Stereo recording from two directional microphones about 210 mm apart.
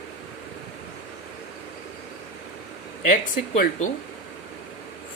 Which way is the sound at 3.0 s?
40° left (ahead or behind).